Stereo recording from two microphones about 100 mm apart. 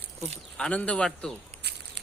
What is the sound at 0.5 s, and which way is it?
Speech, 10° left (ahead or behind).